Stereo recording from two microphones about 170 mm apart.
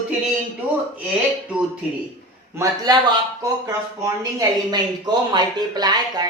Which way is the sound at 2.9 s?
25° right (ahead or behind).